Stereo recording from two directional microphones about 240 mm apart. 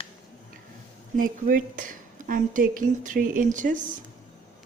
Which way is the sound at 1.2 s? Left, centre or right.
Right.